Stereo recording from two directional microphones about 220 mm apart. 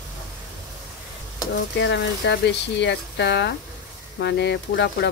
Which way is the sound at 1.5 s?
55° left (ahead or behind).